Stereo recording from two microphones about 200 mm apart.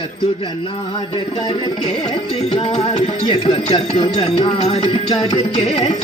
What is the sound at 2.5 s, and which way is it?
Music, 30° left (ahead or behind).